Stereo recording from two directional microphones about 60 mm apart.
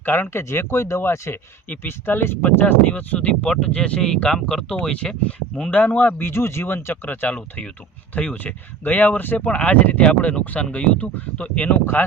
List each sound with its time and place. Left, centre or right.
0.0 s speech: left; by 5.1 s centre
5.7 s speech: left
7.3 s speech: left